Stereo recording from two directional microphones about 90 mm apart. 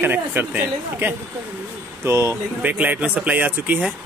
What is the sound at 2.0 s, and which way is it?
Speech, 35° right (ahead or behind).